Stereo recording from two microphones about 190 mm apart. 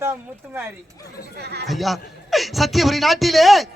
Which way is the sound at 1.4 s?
60° right (ahead or behind).